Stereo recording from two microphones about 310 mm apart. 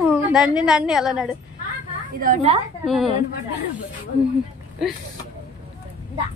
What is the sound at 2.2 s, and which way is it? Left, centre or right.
Speech, right.